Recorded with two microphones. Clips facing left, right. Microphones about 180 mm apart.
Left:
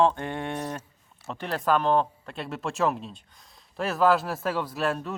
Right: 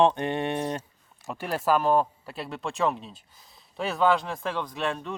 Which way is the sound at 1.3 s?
10° right (ahead or behind).